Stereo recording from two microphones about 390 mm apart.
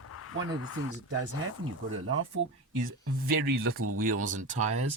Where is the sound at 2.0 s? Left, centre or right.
Right.